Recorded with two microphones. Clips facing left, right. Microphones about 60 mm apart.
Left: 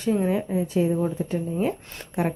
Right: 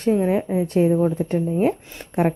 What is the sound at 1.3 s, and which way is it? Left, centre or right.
A woman's voice, right.